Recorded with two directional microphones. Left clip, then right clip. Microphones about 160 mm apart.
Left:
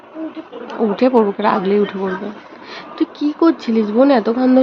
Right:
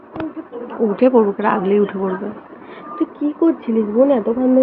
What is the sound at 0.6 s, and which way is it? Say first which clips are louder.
Speech: even; 30° left (ahead or behind).